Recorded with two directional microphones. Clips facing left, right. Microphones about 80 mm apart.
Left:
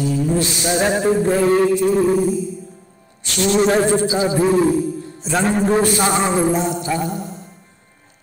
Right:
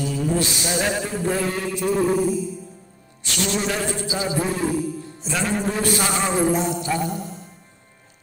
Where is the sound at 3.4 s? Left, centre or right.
Left.